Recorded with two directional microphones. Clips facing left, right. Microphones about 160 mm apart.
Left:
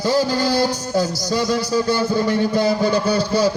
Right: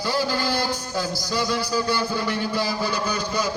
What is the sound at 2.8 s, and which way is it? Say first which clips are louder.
Speech: left 8 dB; 30° left (ahead or behind).